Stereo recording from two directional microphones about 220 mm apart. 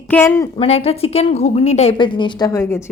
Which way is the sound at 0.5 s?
25° left (ahead or behind).